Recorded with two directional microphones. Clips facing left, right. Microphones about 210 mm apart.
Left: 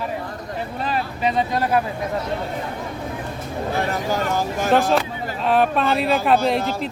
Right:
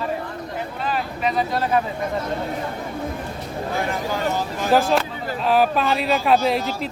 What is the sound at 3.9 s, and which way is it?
Speech, 45° left (ahead or behind).